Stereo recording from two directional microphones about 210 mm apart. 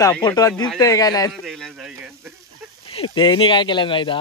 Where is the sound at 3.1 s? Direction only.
20° left (ahead or behind).